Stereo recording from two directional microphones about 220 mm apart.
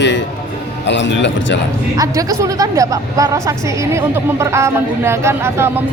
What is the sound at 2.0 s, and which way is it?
Speech, 15° right (ahead or behind).